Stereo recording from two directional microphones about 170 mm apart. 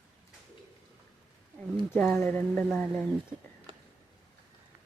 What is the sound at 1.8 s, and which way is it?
Speech, 5° left (ahead or behind).